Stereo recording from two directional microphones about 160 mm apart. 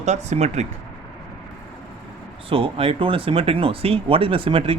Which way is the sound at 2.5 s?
35° right (ahead or behind).